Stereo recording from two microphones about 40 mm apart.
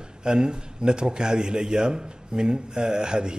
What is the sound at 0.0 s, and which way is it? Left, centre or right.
A man's voice, centre.